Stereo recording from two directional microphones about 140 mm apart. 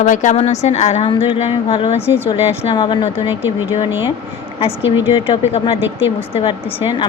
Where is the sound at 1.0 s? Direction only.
35° left (ahead or behind).